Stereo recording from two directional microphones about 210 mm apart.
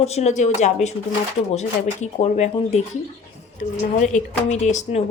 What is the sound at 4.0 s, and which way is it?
A woman's voice, 35° left (ahead or behind).